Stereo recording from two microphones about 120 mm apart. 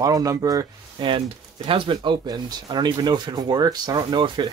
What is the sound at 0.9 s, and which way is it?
Speech, 45° right (ahead or behind).